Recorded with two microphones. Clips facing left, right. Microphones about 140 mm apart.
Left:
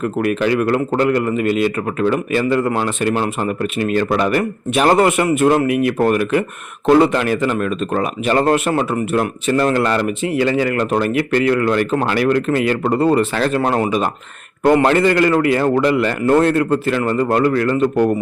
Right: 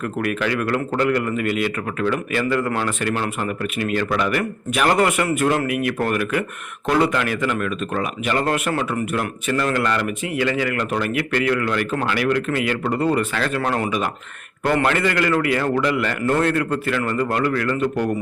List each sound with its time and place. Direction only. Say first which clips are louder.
0.0 s a man's voice: left 5 dB; 25° left (ahead or behind)